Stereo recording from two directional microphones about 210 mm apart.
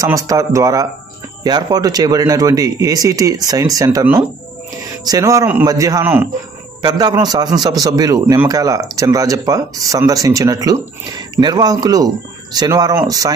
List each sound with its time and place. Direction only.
0.0 s a man's voice: 15° right (ahead or behind)